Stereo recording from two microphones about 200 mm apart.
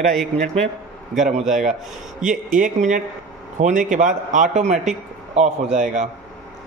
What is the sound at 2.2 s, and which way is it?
A man's voice, 40° right (ahead or behind).